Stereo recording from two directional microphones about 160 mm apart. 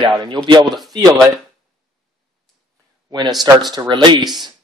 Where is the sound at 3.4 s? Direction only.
25° right (ahead or behind).